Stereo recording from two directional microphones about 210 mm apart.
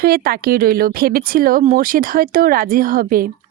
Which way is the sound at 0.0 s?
45° right (ahead or behind).